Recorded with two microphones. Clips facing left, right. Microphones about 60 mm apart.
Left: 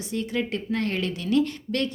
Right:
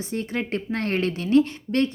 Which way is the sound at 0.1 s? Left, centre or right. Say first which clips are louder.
Even; right.